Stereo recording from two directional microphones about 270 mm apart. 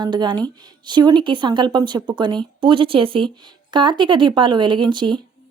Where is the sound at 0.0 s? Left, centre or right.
Centre.